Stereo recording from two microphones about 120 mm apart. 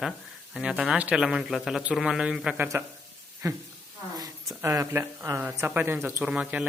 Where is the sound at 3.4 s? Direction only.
30° right (ahead or behind).